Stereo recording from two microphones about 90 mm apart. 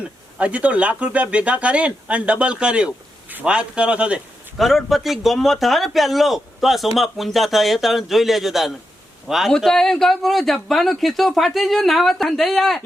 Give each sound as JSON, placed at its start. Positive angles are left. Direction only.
{"t": 0.0, "sound": "speech", "side_deg": -15}
{"t": 4.5, "sound": "a man's voice", "side_deg": 0}